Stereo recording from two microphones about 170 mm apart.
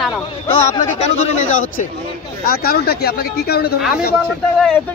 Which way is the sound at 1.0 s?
40° left (ahead or behind).